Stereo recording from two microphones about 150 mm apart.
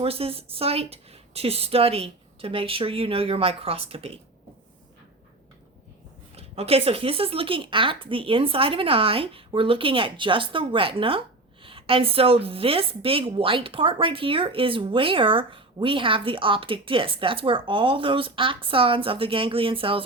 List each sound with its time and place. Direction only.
0.0 s a woman's voice: 40° right (ahead or behind)
6.3 s a woman's voice: 40° right (ahead or behind)